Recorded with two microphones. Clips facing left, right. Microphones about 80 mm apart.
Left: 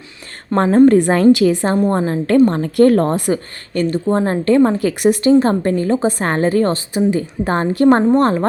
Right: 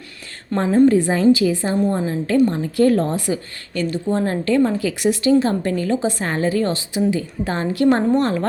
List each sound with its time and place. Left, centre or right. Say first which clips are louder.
0.5 s a woman's voice: left 4 dB; left